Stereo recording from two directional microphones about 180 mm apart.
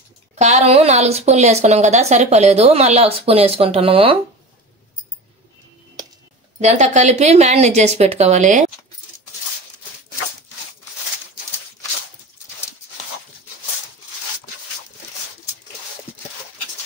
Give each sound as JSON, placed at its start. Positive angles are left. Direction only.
{"t": 0.4, "sound": "a woman's voice", "side_deg": -40}
{"t": 6.6, "sound": "a woman's voice", "side_deg": -40}